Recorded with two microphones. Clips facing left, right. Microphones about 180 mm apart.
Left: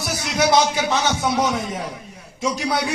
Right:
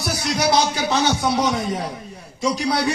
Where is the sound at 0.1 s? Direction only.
35° right (ahead or behind).